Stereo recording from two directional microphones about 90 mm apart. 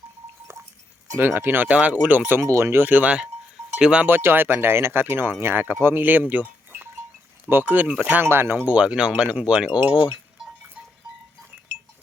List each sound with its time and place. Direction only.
1.2 s speech: 25° right (ahead or behind)
3.8 s cowbell: 5° right (ahead or behind)
4.0 s speech: 25° right (ahead or behind)